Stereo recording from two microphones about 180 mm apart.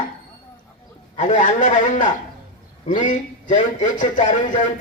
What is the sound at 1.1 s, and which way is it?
A man's voice, 45° left (ahead or behind).